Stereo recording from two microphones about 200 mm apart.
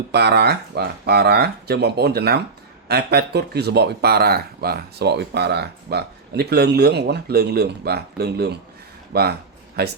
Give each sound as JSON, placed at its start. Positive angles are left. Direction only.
{"t": 0.1, "sound": "speech", "side_deg": -55}